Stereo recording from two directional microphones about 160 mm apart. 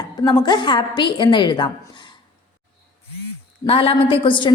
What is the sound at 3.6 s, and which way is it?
Speech, 35° left (ahead or behind).